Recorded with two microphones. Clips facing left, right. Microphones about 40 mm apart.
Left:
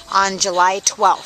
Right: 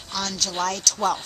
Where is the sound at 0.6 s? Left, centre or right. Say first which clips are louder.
Left 10 dB; left.